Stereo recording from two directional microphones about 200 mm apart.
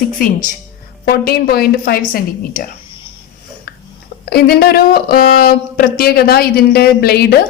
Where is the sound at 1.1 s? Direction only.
50° left (ahead or behind).